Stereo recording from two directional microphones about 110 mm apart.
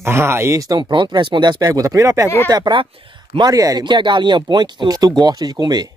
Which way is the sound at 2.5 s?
45° right (ahead or behind).